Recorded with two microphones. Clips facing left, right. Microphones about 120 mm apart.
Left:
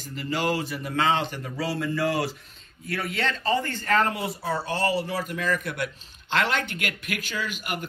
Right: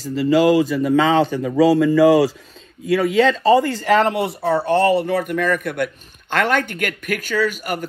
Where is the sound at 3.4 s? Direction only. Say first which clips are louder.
Right 11 dB; 90° right.